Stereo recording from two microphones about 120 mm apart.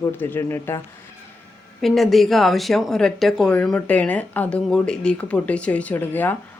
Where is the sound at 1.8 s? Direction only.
Centre (ahead or behind).